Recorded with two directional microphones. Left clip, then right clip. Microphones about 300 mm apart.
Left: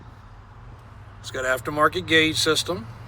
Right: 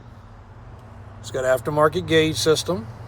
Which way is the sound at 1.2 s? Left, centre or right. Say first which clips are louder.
Right 4 dB; centre.